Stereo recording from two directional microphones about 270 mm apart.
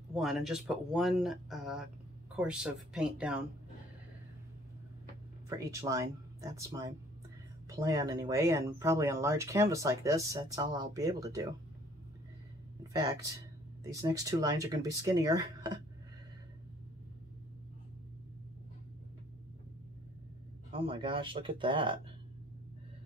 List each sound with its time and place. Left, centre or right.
0.1 s speech: centre
5.6 s speech: centre
14.0 s speech: centre
20.7 s speech: centre